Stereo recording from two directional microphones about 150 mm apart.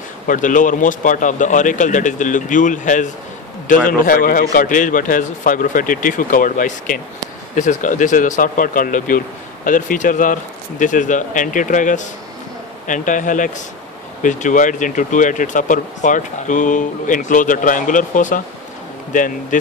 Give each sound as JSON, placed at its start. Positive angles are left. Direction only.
{"t": 0.3, "sound": "speech", "side_deg": 60}